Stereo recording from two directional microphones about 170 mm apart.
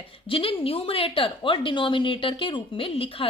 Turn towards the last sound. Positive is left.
turn(degrees=35)  # may be behind; listen again after turning